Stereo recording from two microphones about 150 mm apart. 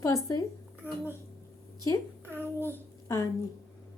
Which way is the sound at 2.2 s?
15° right (ahead or behind).